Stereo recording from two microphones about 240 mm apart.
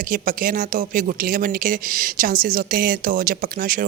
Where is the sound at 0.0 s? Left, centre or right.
Right.